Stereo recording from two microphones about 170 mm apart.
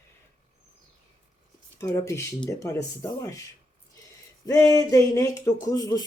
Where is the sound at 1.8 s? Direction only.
15° left (ahead or behind).